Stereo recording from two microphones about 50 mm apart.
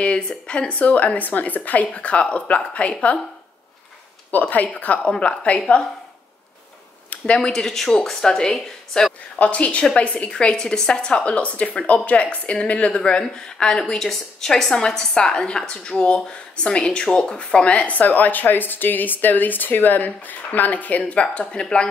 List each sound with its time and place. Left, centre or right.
0.0 s a woman's voice: left
0.7 s a woman's voice: left
4.3 s a woman's voice: left
7.3 s a woman's voice: centre
9.4 s a woman's voice: left